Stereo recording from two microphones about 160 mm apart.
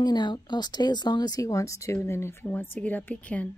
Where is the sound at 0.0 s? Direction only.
25° left (ahead or behind); by 3.4 s 10° left (ahead or behind).